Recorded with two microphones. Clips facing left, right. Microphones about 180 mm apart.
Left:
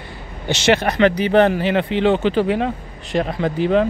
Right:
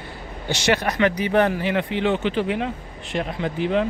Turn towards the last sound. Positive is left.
turn(degrees=40)  # may be behind; listen again after turning